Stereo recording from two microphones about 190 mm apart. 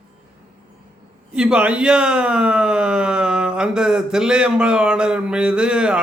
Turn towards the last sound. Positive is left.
turn(degrees=-5)  # may be behind; listen again after turning